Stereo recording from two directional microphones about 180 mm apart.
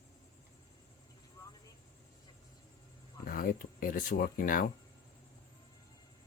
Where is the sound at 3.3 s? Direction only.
50° left (ahead or behind).